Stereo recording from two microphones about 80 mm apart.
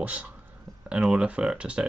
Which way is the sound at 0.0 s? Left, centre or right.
Centre.